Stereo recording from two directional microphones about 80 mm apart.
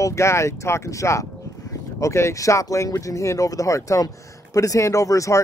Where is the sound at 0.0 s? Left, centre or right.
Left.